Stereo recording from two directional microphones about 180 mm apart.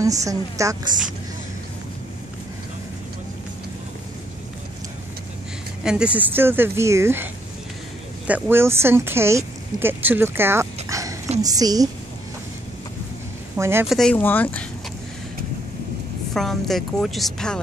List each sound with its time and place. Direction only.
0.2 s speech: 20° right (ahead or behind)
5.9 s speech: 5° right (ahead or behind)
8.3 s a woman's voice: 10° right (ahead or behind)
13.6 s speech: 15° right (ahead or behind)
13.8 s speech: 5° left (ahead or behind)
16.3 s speech: centre (ahead or behind)